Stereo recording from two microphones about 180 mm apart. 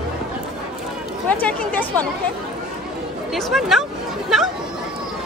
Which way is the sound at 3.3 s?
Centre (ahead or behind).